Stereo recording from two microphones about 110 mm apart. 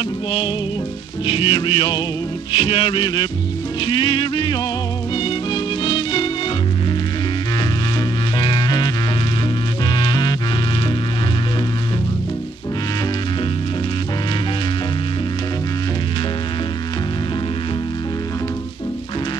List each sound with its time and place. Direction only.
1.2 s music: 50° left (ahead or behind)
2.5 s music: 60° left (ahead or behind)
3.8 s music: 50° left (ahead or behind)
8.4 s music: 45° left (ahead or behind)
9.9 s music: 40° left (ahead or behind)